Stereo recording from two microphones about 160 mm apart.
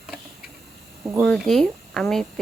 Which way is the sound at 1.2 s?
Centre (ahead or behind).